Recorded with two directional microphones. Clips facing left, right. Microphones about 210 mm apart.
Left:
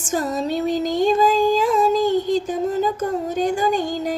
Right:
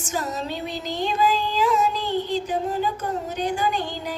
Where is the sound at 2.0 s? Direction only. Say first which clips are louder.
Left 6 dB; 45° left (ahead or behind).